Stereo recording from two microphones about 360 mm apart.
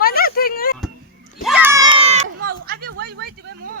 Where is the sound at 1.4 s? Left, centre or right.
Centre; by 3.3 s right.